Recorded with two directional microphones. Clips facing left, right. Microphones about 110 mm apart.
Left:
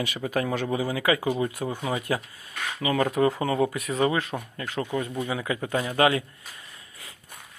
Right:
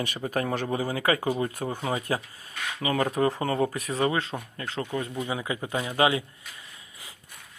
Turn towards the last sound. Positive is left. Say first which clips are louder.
# left 2 dB
turn(degrees=-20)  # may be behind; listen again after turning